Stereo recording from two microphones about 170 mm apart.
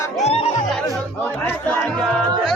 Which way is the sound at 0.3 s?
40° left (ahead or behind).